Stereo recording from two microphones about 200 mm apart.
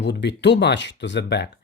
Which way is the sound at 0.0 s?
60° left (ahead or behind).